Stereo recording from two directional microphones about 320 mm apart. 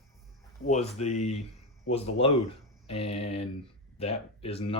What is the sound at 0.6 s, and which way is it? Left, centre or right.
Speech, left.